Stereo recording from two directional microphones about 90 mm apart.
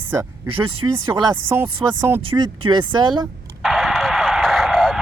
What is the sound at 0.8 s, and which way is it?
Speech, 35° right (ahead or behind).